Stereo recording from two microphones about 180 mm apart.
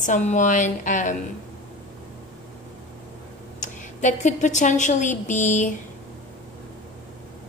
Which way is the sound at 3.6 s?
40° left (ahead or behind).